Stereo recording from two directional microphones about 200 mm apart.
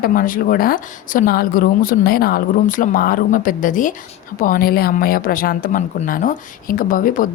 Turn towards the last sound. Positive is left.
turn(degrees=40)  # may be behind; listen again after turning